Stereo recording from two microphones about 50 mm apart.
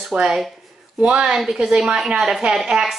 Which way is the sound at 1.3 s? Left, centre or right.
Centre.